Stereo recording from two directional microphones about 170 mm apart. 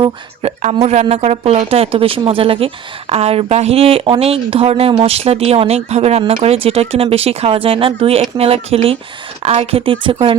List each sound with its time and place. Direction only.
0.0 s speech: 35° right (ahead or behind)